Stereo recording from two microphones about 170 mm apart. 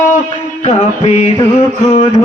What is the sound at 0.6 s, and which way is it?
Music, 40° left (ahead or behind).